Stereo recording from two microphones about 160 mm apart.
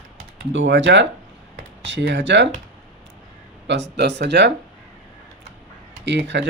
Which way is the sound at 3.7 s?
90° right.